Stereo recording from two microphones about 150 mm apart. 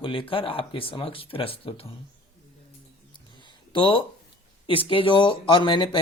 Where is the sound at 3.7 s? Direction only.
35° left (ahead or behind).